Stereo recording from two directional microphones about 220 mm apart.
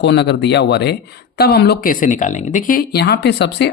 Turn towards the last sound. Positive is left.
turn(degrees=50)  # may be behind; listen again after turning